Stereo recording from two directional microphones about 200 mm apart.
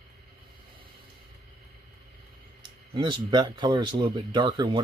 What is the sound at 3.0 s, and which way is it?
Speech, 20° right (ahead or behind).